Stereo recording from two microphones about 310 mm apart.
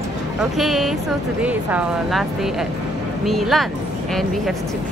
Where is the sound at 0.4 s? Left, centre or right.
Centre.